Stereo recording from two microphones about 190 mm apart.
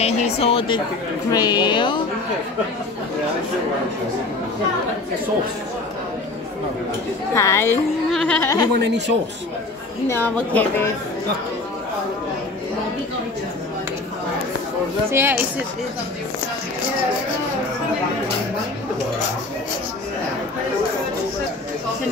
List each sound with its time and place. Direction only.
0.0 s a woman's voice: 30° left (ahead or behind)
7.3 s a woman's voice: 15° left (ahead or behind)
8.7 s speech: 65° right (ahead or behind)
10.0 s a woman's voice: 10° left (ahead or behind)
15.0 s speech: 10° right (ahead or behind)